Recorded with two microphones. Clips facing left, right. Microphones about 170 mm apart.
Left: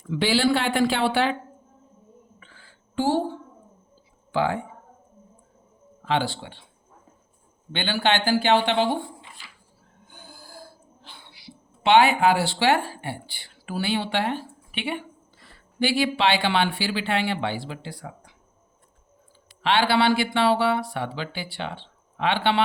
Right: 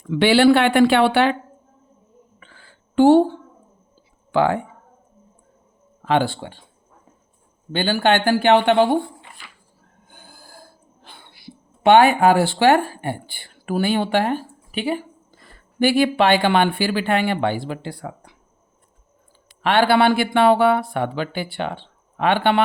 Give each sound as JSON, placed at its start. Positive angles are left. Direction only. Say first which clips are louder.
{"t": 0.1, "sound": "speech", "louder": "right 8 dB", "side_deg": -65}
{"t": 2.4, "sound": "a sound", "louder": "right 3 dB", "side_deg": -60}
{"t": 4.3, "sound": "speech", "louder": "right 6 dB", "side_deg": -60}
{"t": 6.1, "sound": "speech", "louder": "right 6 dB", "side_deg": -55}
{"t": 7.7, "sound": "speech", "louder": "right 5 dB", "side_deg": -45}
{"t": 9.4, "sound": "a sound", "louder": "right 3 dB", "side_deg": -55}
{"t": 10.1, "sound": "speech", "louder": "left 1 dB", "side_deg": -50}
{"t": 19.6, "sound": "speech", "louder": "right 5 dB", "side_deg": -50}